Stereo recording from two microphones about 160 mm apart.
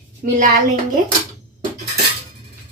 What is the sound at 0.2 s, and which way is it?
Speech, 65° right (ahead or behind).